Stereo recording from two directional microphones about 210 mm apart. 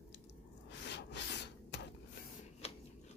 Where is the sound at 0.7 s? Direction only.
55° left (ahead or behind).